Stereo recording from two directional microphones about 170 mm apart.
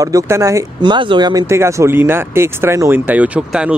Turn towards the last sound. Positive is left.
turn(degrees=-5)  # may be behind; listen again after turning